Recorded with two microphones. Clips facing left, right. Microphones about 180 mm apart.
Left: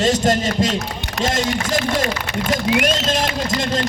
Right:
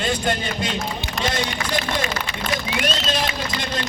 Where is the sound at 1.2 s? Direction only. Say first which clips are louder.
Left 5 dB; 45° left (ahead or behind).